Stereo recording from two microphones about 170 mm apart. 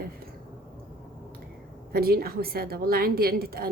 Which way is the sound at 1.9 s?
60° right (ahead or behind).